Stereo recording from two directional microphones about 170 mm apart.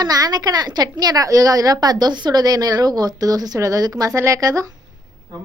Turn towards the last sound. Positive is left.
turn(degrees=-20)  # may be behind; listen again after turning